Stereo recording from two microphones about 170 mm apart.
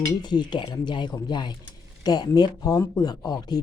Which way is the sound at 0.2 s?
25° left (ahead or behind).